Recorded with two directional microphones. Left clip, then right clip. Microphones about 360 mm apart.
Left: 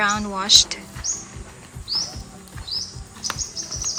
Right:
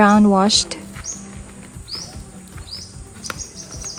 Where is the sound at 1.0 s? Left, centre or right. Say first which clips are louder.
Left 5 dB; centre.